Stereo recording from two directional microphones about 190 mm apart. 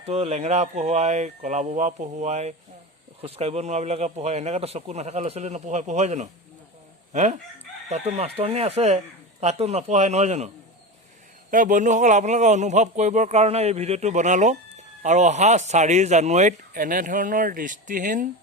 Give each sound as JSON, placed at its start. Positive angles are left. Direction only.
{"t": 0.1, "sound": "speech", "side_deg": -35}
{"t": 7.1, "sound": "chicken", "side_deg": -40}
{"t": 7.9, "sound": "speech", "side_deg": -35}
{"t": 11.5, "sound": "speech", "side_deg": -45}